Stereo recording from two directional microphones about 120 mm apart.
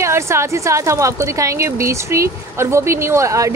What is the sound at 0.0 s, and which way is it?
A woman's voice, 25° right (ahead or behind).